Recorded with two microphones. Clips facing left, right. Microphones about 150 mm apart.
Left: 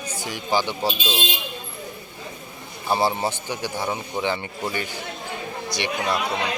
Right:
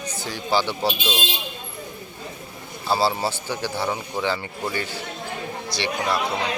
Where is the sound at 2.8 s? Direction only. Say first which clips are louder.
Even; 20° left (ahead or behind).